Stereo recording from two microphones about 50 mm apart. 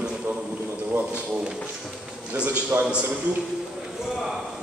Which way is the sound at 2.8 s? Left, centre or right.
Centre.